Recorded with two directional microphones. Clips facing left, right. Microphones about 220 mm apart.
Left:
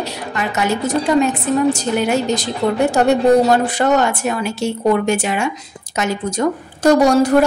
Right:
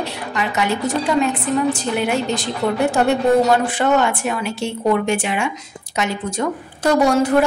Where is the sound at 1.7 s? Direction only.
40° left (ahead or behind).